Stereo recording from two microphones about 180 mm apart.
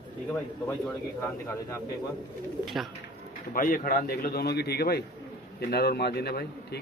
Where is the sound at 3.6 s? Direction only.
50° left (ahead or behind).